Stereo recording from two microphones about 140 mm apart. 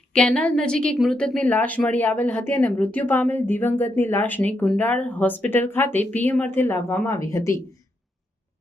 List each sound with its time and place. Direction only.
0.1 s a woman's voice: 10° left (ahead or behind)